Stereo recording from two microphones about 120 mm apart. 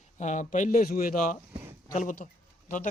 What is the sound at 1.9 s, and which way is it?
Speech, 90° left.